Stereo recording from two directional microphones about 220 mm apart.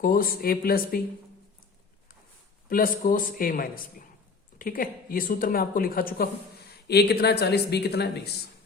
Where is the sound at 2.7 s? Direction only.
40° left (ahead or behind).